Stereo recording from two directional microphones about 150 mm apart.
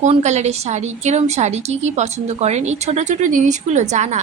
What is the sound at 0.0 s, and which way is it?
A woman's voice, 50° right (ahead or behind).